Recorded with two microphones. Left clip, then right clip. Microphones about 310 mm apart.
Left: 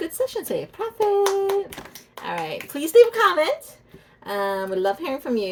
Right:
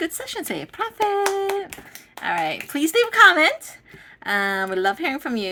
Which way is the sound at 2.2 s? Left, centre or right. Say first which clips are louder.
Right 5 dB; right.